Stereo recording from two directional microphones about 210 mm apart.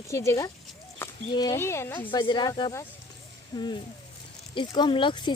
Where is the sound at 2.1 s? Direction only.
20° left (ahead or behind).